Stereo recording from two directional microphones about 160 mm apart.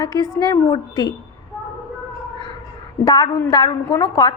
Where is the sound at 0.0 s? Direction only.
25° left (ahead or behind).